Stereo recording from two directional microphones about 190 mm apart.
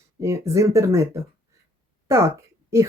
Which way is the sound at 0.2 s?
15° right (ahead or behind).